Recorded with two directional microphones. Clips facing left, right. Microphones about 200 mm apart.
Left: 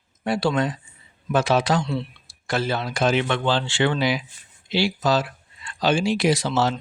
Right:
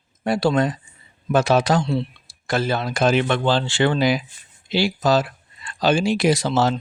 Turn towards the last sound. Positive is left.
turn(degrees=-45)  # may be behind; listen again after turning